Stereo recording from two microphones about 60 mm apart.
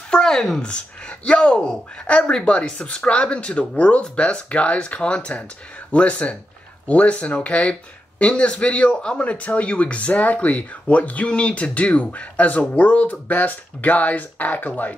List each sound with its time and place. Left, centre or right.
0.1 s a man's voice: centre; by 15.0 s left